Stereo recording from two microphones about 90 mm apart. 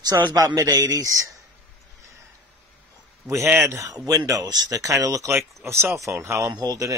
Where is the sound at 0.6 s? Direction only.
40° right (ahead or behind).